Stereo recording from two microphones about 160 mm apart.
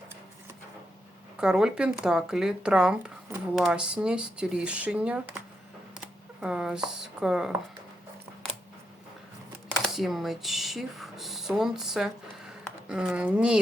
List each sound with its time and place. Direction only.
1.4 s speech: 5° right (ahead or behind)
6.4 s speech: 5° right (ahead or behind)
9.8 s speech: centre (ahead or behind)